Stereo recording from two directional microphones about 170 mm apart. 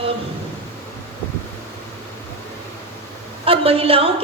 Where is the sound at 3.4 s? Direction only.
35° right (ahead or behind).